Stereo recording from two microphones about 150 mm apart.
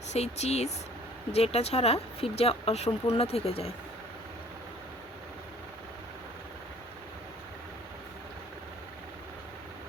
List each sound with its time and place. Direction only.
0.1 s speech: 45° left (ahead or behind)